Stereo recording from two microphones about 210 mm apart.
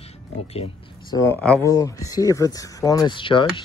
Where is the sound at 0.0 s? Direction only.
30° left (ahead or behind).